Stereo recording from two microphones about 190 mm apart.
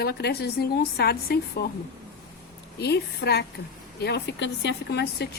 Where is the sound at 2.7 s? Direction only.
60° left (ahead or behind).